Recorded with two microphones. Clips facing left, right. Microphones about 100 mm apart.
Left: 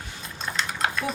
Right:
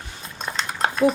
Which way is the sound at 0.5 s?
35° right (ahead or behind).